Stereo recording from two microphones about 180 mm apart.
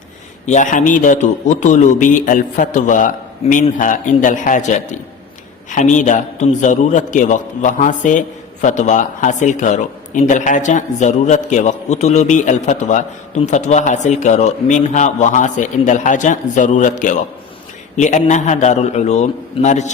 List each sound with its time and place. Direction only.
0.4 s a man's voice: 45° left (ahead or behind)